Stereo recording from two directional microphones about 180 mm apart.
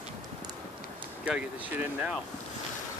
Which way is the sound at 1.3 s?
10° right (ahead or behind).